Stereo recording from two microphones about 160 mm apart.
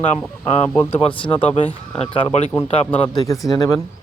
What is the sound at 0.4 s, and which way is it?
Speech, 40° left (ahead or behind).